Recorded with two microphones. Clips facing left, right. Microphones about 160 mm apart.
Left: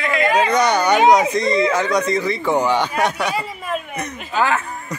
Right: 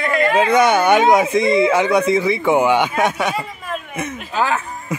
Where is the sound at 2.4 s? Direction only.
20° right (ahead or behind).